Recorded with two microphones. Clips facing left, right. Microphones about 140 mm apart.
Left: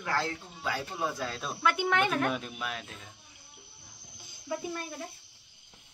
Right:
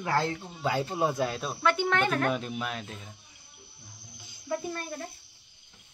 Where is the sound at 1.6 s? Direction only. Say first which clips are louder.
Right 1 dB; 10° left (ahead or behind).